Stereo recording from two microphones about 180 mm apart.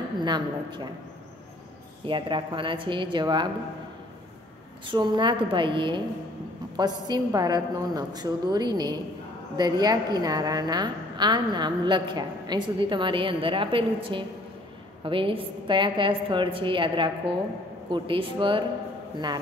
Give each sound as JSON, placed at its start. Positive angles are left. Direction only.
{"t": 0.2, "sound": "a woman's voice", "side_deg": -25}
{"t": 2.0, "sound": "a woman's voice", "side_deg": -25}
{"t": 4.8, "sound": "a woman's voice", "side_deg": -25}